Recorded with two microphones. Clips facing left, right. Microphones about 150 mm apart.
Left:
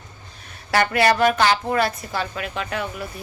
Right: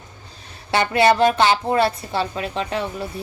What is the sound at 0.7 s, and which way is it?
A woman's voice, 25° right (ahead or behind).